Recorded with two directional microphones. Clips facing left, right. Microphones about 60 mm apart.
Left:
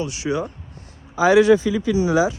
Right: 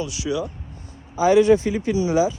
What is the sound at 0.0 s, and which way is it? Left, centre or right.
Speech, left.